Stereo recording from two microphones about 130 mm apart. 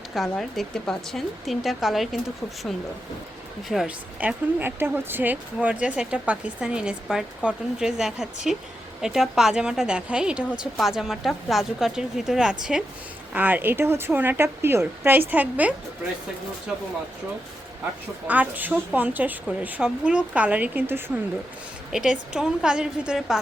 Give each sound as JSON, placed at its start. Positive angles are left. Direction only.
{"t": 0.1, "sound": "a woman's voice", "side_deg": 0}
{"t": 3.7, "sound": "a woman's voice", "side_deg": 0}
{"t": 4.2, "sound": "a woman's voice", "side_deg": -15}
{"t": 18.3, "sound": "a woman's voice", "side_deg": -10}